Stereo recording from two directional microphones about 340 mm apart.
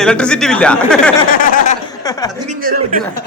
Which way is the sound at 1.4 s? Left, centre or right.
Left.